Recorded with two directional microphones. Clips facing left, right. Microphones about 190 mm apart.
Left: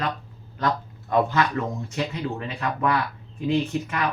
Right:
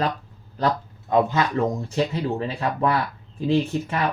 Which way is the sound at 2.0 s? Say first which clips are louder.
Right 5 dB; 30° right (ahead or behind).